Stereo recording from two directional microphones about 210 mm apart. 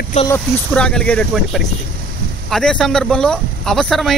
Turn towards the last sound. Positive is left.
turn(degrees=0)  # may be behind; listen again after turning